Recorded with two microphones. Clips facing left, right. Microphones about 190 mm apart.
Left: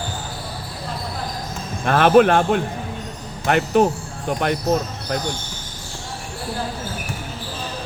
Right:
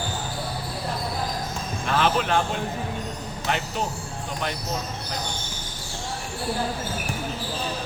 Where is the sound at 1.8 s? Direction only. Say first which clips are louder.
Left 10 dB; 55° left (ahead or behind).